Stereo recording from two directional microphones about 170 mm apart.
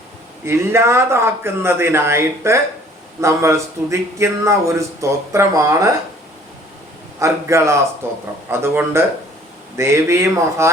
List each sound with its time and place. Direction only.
0.4 s speech: 15° right (ahead or behind)
7.2 s speech: 15° right (ahead or behind)